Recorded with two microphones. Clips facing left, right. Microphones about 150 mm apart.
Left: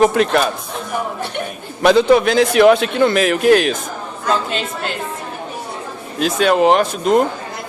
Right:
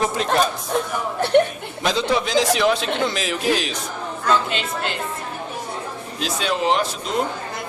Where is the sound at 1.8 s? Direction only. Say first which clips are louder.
Left 10 dB; 60° left (ahead or behind).